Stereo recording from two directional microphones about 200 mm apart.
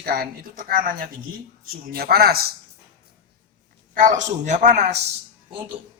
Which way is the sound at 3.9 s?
40° right (ahead or behind).